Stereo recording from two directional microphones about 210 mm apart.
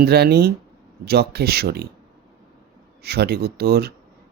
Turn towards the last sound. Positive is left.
turn(degrees=-50)  # may be behind; listen again after turning